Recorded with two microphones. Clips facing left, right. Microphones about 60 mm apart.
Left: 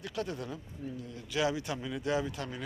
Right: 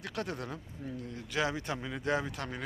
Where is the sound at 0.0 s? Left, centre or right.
Right.